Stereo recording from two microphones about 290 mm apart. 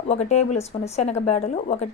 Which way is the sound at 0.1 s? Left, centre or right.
Left.